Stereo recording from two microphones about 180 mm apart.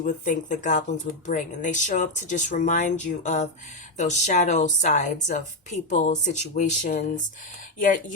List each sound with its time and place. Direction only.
0.0 s speech: 45° left (ahead or behind)